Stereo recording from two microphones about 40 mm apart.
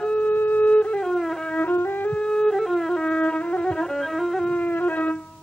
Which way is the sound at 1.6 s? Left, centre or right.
Left.